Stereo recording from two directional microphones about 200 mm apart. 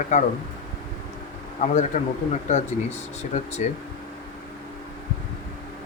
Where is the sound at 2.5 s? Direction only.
35° left (ahead or behind).